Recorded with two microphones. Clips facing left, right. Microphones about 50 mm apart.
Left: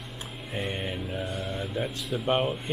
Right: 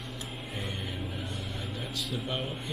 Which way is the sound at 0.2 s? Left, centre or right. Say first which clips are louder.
Left 6 dB; left.